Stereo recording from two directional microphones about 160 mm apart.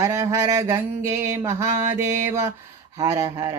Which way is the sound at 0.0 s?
20° right (ahead or behind).